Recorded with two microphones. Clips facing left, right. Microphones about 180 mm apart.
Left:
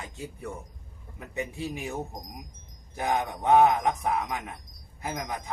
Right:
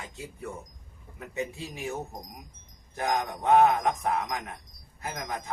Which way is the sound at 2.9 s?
15° left (ahead or behind).